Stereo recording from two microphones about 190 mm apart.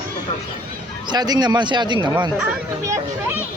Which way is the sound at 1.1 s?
20° right (ahead or behind).